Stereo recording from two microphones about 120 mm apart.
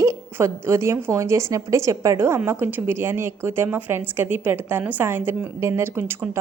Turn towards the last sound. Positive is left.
turn(degrees=-20)  # may be behind; listen again after turning